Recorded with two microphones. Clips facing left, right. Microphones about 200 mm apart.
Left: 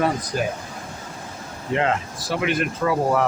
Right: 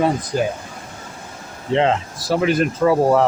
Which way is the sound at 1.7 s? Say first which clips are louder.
Right 5 dB; 25° right (ahead or behind).